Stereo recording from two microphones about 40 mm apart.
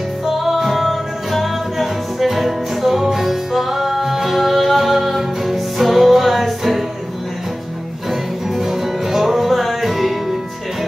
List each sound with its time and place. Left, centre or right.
0.4 s music: centre
8.1 s music: centre